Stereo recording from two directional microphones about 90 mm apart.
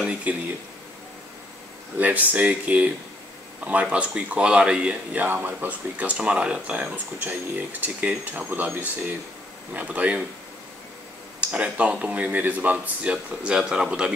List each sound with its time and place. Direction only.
0.0 s speech: 15° right (ahead or behind)
2.0 s speech: 15° right (ahead or behind)
9.8 s speech: 15° right (ahead or behind)
11.4 s speech: 15° right (ahead or behind)